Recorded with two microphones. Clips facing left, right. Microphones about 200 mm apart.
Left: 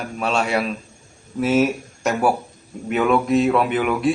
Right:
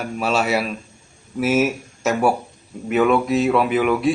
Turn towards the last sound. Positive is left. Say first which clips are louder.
# right 2 dB
turn(degrees=0)  # may be behind; listen again after turning